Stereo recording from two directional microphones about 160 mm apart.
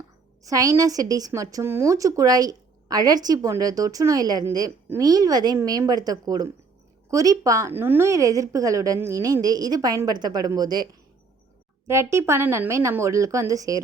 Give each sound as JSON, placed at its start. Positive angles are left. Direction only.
{"t": 0.4, "sound": "a woman's voice", "side_deg": -20}
{"t": 11.9, "sound": "speech", "side_deg": -15}